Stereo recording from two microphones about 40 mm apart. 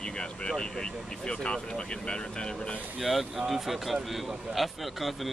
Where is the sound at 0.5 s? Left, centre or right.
Centre.